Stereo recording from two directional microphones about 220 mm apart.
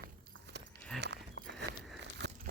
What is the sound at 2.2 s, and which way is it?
Crumpling, 50° right (ahead or behind).